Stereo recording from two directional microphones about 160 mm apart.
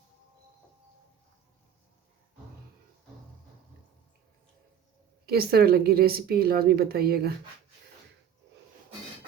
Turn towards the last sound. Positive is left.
turn(degrees=-80)